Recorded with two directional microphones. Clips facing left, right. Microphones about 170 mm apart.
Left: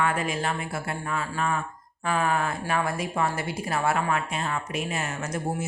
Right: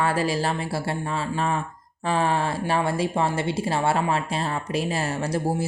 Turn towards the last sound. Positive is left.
turn(degrees=-30)  # may be behind; listen again after turning